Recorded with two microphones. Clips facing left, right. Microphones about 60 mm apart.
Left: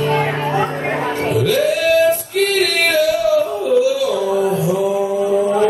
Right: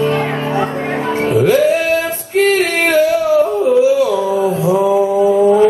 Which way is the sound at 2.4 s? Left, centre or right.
Right.